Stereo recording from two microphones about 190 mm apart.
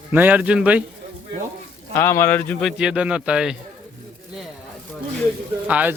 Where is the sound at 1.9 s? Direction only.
15° left (ahead or behind).